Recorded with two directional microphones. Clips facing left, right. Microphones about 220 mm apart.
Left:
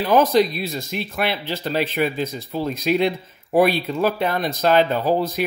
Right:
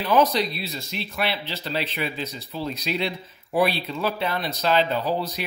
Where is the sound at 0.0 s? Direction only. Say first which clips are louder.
Left 4 dB; 50° left (ahead or behind).